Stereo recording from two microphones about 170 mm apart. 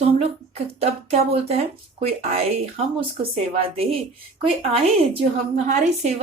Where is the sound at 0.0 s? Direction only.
35° right (ahead or behind).